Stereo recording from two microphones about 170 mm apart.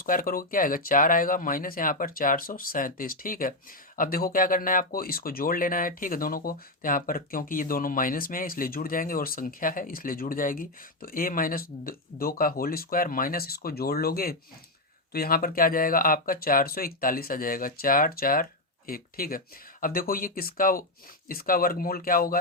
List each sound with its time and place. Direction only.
0.0 s speech: 55° left (ahead or behind)